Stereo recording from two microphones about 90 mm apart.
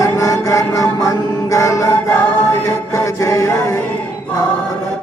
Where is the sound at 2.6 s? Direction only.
35° left (ahead or behind).